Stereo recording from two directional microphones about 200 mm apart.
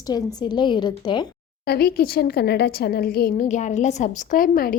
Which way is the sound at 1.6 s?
50° left (ahead or behind).